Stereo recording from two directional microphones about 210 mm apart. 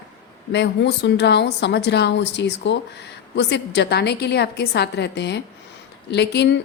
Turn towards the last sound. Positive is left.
turn(degrees=55)  # may be behind; listen again after turning